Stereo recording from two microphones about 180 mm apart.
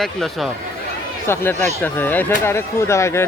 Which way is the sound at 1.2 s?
15° left (ahead or behind).